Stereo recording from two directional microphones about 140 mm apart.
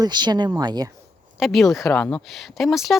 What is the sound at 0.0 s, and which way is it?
Speech, 30° right (ahead or behind).